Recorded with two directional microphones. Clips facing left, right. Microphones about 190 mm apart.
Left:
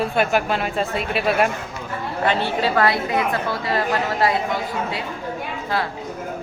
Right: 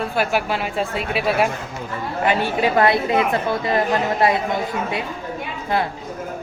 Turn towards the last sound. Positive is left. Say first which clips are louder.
# right 3 dB
turn(degrees=-20)  # may be behind; listen again after turning